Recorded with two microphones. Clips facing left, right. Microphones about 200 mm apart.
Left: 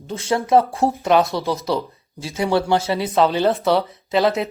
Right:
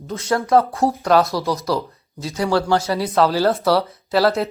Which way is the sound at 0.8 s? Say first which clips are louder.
Even; centre (ahead or behind).